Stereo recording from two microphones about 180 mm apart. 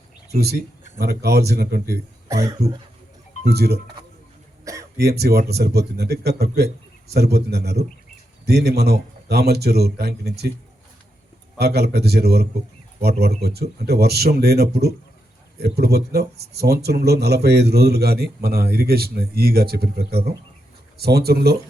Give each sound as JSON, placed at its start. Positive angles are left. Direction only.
{"t": 0.3, "sound": "a man's voice", "side_deg": -65}
{"t": 2.2, "sound": "speech", "side_deg": -15}
{"t": 3.4, "sound": "a man's voice", "side_deg": -60}
{"t": 4.6, "sound": "throat clearing", "side_deg": -15}
{"t": 4.9, "sound": "a man's voice", "side_deg": -65}
{"t": 11.5, "sound": "a man's voice", "side_deg": -60}